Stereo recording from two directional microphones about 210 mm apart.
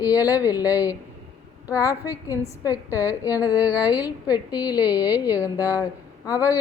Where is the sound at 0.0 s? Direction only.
15° left (ahead or behind).